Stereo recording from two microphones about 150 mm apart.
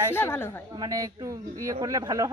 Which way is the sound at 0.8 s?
25° right (ahead or behind).